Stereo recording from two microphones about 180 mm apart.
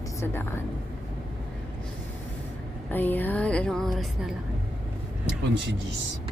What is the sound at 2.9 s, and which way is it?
Speech, 10° left (ahead or behind).